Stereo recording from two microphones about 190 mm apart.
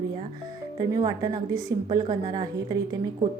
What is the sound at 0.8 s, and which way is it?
A woman's voice, 20° right (ahead or behind).